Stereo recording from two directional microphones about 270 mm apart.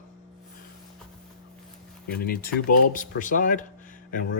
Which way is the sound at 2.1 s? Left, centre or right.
Left.